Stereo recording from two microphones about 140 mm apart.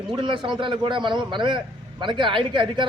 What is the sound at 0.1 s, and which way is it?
A man's voice, 35° right (ahead or behind).